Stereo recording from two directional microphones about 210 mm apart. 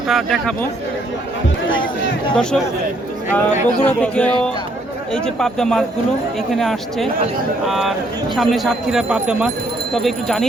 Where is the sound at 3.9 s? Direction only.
5° left (ahead or behind).